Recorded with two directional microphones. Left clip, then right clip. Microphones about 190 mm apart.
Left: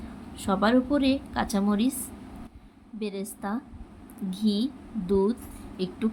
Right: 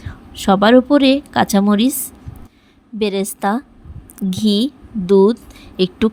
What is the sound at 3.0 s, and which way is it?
A woman's voice, 45° right (ahead or behind).